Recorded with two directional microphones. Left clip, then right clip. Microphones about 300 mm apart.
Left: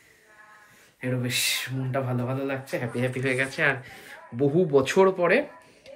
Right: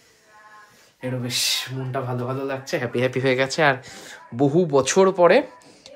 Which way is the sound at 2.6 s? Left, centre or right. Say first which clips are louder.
Right 6 dB; right.